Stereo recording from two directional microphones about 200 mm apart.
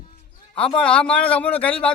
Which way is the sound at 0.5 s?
5° left (ahead or behind).